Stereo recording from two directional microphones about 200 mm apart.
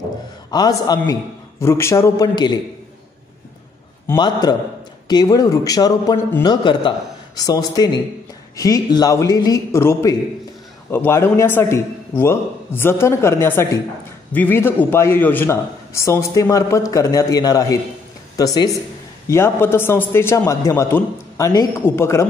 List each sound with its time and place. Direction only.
0.5 s a man's voice: 20° left (ahead or behind)
4.1 s a man's voice: 20° left (ahead or behind)